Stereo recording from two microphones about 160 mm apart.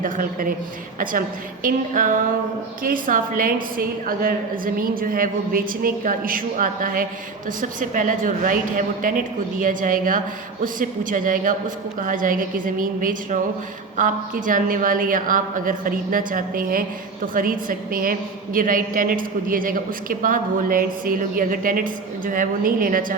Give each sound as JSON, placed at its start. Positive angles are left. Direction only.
{"t": 0.0, "sound": "a woman's voice", "side_deg": -60}
{"t": 1.6, "sound": "a woman's voice", "side_deg": -55}